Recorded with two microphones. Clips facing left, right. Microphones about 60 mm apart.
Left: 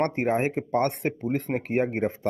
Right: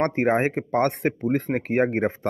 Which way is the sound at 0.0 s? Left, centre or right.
Right.